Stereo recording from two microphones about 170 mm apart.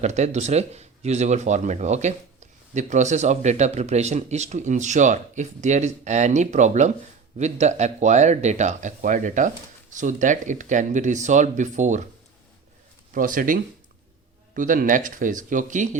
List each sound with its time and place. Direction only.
0.0 s speech: 40° right (ahead or behind)
13.1 s speech: 55° right (ahead or behind)